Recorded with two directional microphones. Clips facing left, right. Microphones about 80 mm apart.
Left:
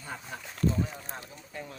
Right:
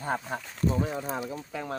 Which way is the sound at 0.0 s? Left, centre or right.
Right.